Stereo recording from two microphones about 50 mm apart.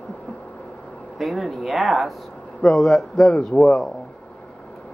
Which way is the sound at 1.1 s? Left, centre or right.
Centre.